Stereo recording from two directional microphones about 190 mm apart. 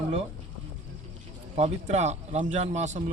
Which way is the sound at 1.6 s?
35° right (ahead or behind).